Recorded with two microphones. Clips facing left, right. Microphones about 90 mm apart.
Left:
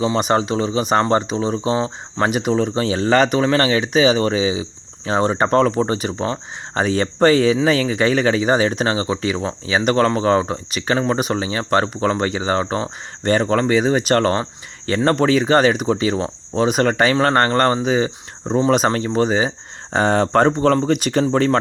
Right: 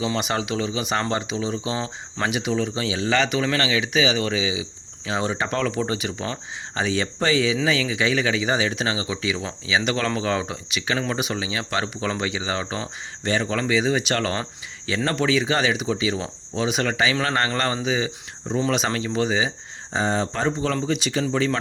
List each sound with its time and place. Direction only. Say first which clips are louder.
0.0 s speech: left 7 dB; 35° left (ahead or behind)
19.9 s speech: left 8 dB; 60° left (ahead or behind); by 21.6 s 45° left (ahead or behind)